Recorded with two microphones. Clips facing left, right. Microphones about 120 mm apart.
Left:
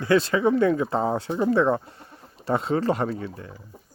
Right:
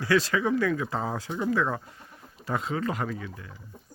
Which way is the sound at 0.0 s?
25° left (ahead or behind).